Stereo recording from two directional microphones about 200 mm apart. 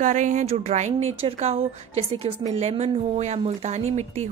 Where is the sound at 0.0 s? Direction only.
40° right (ahead or behind).